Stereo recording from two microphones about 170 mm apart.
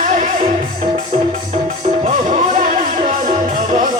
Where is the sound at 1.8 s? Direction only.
40° right (ahead or behind).